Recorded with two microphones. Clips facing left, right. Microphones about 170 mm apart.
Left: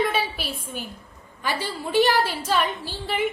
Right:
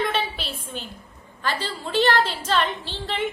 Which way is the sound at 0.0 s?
5° left (ahead or behind).